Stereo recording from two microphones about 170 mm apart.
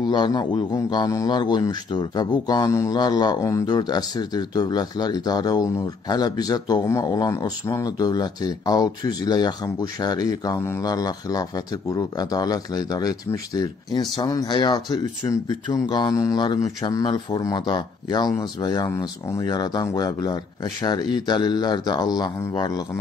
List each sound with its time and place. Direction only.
0.0 s a man's voice: 25° left (ahead or behind)